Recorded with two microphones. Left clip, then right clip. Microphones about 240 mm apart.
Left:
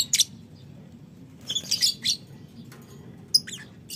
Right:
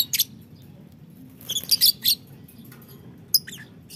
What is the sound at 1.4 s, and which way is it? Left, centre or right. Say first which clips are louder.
Bird: right 4 dB; right.